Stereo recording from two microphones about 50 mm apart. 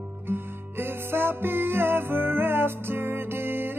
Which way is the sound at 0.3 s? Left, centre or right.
Right.